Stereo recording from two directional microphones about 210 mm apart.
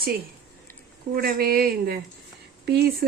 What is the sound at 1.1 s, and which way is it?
Speech, 45° right (ahead or behind).